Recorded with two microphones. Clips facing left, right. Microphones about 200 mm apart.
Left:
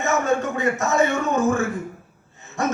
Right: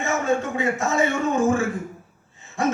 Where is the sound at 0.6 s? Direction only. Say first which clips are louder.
Left 2 dB; 65° left (ahead or behind).